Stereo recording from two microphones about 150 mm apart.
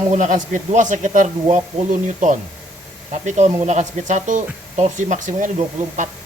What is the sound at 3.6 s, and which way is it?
Speech, 55° right (ahead or behind).